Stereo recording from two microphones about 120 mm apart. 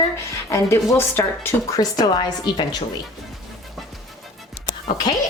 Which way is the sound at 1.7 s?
35° left (ahead or behind).